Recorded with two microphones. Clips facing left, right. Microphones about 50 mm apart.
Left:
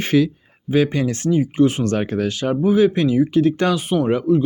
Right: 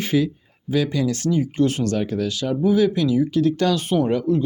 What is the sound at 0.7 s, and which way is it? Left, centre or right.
Speech, left.